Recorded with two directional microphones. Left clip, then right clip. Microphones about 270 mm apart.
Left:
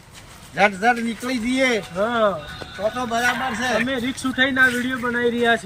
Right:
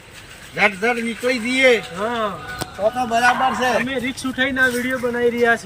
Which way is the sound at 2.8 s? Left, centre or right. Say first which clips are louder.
Right 4 dB; centre.